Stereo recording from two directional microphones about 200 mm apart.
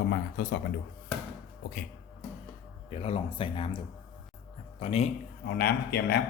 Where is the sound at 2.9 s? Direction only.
30° left (ahead or behind).